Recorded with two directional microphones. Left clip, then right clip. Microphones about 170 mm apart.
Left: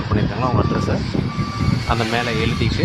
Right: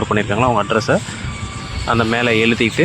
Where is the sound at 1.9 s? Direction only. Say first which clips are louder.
Right 6 dB; 20° right (ahead or behind).